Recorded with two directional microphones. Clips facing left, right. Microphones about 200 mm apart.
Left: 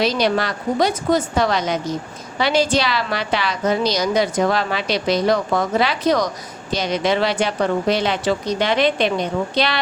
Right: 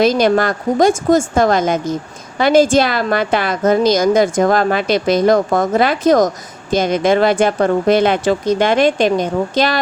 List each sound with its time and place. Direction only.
0.0 s a woman's voice: 50° right (ahead or behind)